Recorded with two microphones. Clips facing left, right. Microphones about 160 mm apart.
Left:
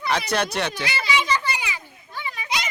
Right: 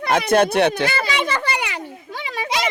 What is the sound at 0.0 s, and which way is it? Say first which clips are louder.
Children playing: right 7 dB; 50° right (ahead or behind).